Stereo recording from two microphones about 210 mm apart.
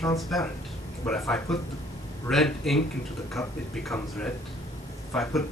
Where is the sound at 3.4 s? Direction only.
15° left (ahead or behind).